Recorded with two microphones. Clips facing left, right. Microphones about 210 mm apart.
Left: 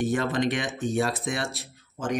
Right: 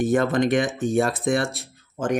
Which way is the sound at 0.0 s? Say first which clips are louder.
Right 5 dB; 50° right (ahead or behind).